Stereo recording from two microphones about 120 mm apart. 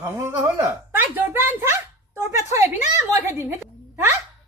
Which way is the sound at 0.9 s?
15° right (ahead or behind).